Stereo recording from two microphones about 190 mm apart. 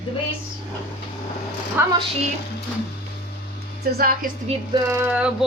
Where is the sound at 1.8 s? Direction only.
10° right (ahead or behind).